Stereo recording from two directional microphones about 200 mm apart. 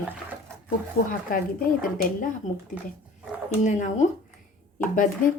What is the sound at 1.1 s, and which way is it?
A woman's voice, 45° left (ahead or behind).